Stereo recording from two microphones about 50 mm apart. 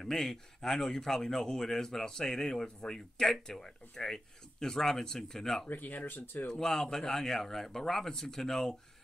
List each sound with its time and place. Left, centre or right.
0.0 s speech: centre
5.7 s speech: left
6.6 s speech: centre